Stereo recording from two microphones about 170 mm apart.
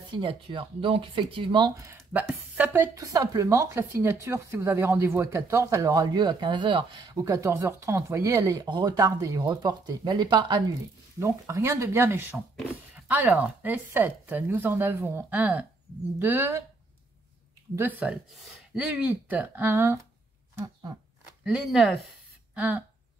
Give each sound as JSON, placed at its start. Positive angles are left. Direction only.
{"t": 0.1, "sound": "speech", "side_deg": -30}
{"t": 1.9, "sound": "speech", "side_deg": -10}
{"t": 17.7, "sound": "speech", "side_deg": -10}
{"t": 20.5, "sound": "a sound", "side_deg": -15}
{"t": 21.5, "sound": "speech", "side_deg": 0}